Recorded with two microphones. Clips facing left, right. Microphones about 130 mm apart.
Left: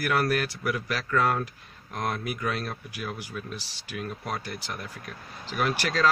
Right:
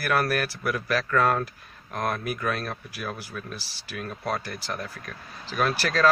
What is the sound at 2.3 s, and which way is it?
Speech, 20° left (ahead or behind).